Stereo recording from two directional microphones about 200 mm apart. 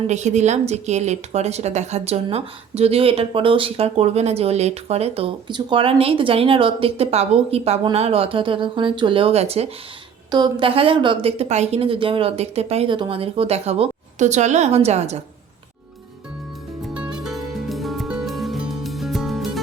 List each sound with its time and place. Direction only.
0.1 s a woman's voice: 35° right (ahead or behind)
16.9 s music: 5° right (ahead or behind)